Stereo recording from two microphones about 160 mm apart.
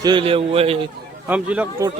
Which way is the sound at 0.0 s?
30° right (ahead or behind).